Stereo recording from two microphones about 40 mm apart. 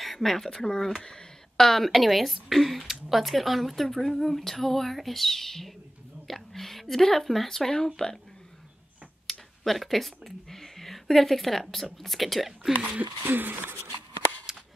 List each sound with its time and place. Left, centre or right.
0.0 s speech: centre
9.3 s a sound: centre
9.7 s speech: centre
13.2 s speech: right